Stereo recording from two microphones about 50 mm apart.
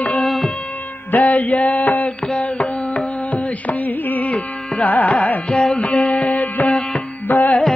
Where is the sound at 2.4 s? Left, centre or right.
Left.